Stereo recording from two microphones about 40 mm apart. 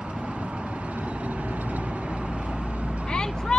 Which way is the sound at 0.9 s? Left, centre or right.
Right.